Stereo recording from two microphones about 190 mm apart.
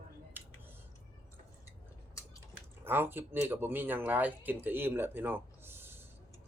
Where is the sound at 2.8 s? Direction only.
10° right (ahead or behind).